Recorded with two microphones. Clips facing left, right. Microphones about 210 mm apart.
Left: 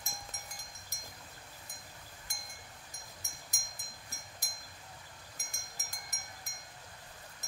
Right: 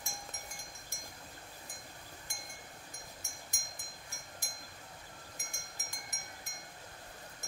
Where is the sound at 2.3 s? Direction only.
40° left (ahead or behind).